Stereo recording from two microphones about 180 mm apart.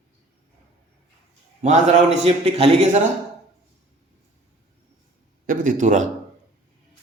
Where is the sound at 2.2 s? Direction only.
35° right (ahead or behind).